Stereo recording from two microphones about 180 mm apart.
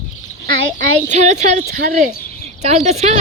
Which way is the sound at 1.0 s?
40° right (ahead or behind).